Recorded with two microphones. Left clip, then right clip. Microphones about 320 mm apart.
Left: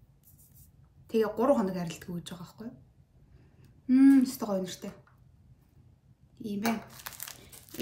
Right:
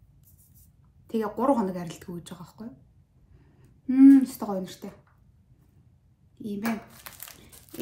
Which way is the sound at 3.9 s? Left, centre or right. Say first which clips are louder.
Right 5 dB; centre.